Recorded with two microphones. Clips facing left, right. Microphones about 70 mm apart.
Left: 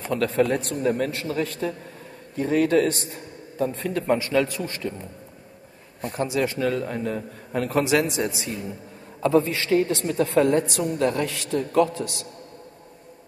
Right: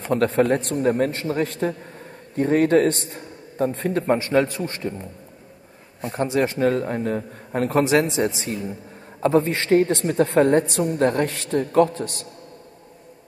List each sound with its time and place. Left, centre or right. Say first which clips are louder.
0.0 s a woman's voice: right 3 dB; right
6.0 s a woman's voice: right 3 dB; right